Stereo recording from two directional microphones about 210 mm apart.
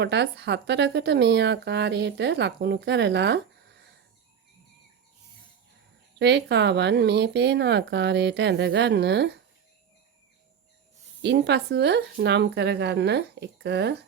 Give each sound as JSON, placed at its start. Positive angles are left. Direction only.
{"t": 0.0, "sound": "speech", "side_deg": -55}
{"t": 6.1, "sound": "speech", "side_deg": -55}
{"t": 11.2, "sound": "speech", "side_deg": -55}